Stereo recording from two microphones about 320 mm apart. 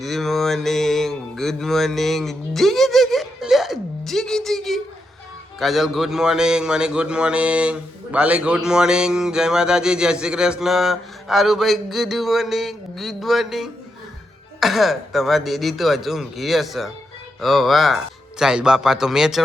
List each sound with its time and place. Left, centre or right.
0.0 s mantra: centre
5.5 s a man's voice: centre